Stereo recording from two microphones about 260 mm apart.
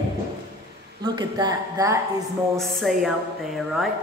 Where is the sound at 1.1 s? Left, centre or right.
Centre.